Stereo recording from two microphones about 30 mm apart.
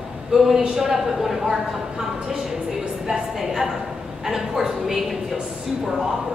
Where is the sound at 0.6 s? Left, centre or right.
Right.